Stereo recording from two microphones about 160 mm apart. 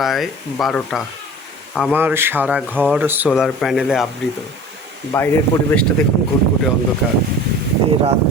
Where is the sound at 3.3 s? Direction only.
Centre (ahead or behind).